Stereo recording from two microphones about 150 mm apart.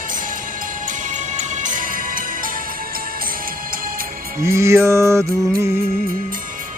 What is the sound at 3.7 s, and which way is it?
Music, 70° right (ahead or behind).